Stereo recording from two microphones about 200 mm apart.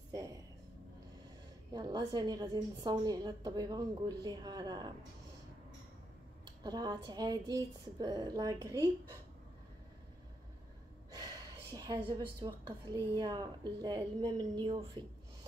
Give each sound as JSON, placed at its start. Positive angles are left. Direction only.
{"t": 0.1, "sound": "a sound", "side_deg": -15}
{"t": 1.7, "sound": "a woman's voice", "side_deg": -20}
{"t": 6.6, "sound": "a woman's voice", "side_deg": -20}
{"t": 11.7, "sound": "a woman's voice", "side_deg": -25}